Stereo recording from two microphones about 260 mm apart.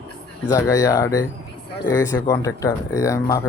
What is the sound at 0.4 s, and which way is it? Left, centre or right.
Speech, centre.